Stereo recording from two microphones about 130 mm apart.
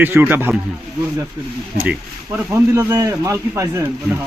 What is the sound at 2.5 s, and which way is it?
Speech, 20° right (ahead or behind).